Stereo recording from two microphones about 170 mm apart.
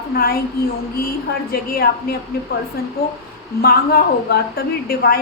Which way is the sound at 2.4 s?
75° left (ahead or behind).